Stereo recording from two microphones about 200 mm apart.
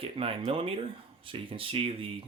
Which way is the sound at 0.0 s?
30° right (ahead or behind).